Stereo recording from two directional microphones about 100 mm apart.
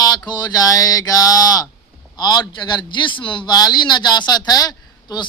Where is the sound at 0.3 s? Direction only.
45° left (ahead or behind).